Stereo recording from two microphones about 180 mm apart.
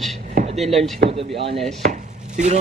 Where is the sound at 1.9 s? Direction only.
40° right (ahead or behind).